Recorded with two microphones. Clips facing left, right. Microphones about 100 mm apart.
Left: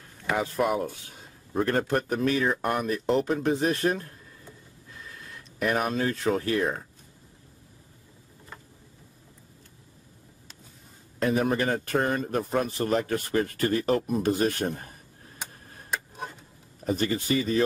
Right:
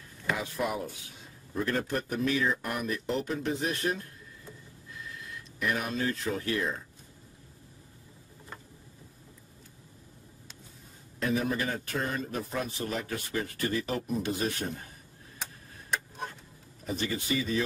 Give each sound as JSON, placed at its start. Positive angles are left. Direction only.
{"t": 0.4, "sound": "speech", "side_deg": 55}
{"t": 5.6, "sound": "speech", "side_deg": 45}
{"t": 11.1, "sound": "speech", "side_deg": 55}
{"t": 15.9, "sound": "a sound", "side_deg": 10}
{"t": 16.8, "sound": "speech", "side_deg": 45}